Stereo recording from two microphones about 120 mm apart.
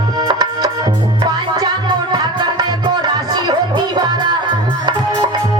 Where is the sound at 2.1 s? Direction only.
35° right (ahead or behind).